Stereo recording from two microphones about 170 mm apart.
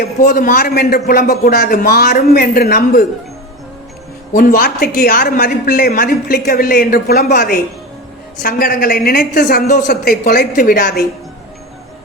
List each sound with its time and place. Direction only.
0.0 s speech: 60° left (ahead or behind)
4.4 s speech: 60° left (ahead or behind)
7.3 s a woman's voice: 50° left (ahead or behind)
9.9 s speech: 60° left (ahead or behind)